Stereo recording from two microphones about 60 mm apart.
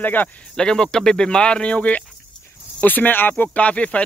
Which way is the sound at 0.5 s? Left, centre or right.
Centre.